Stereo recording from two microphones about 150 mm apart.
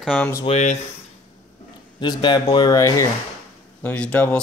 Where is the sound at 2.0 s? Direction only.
30° left (ahead or behind).